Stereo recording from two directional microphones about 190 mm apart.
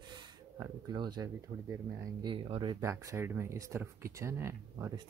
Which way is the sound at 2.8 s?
15° right (ahead or behind).